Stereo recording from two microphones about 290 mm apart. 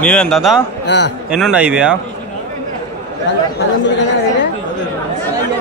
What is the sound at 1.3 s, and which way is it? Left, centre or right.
Speech, centre.